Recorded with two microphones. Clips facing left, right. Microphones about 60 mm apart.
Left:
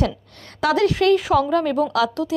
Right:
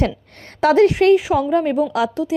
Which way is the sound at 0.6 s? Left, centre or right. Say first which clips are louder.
Right 5 dB; right.